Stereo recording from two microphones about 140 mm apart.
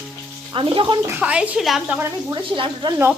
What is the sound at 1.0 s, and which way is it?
Speech, 10° right (ahead or behind).